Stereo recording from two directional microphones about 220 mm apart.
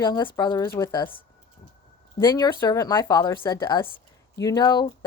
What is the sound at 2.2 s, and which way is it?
Speech, 15° left (ahead or behind).